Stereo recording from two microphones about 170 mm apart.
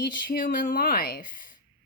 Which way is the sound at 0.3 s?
55° left (ahead or behind).